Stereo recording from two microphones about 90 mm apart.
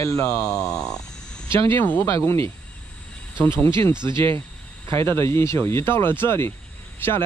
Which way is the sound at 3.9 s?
60° right (ahead or behind).